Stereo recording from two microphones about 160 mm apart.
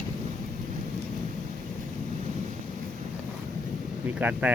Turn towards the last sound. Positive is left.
turn(degrees=-10)  # may be behind; listen again after turning